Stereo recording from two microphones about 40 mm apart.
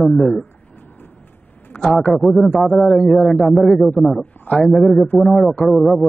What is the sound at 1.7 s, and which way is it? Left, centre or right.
A man's voice, centre.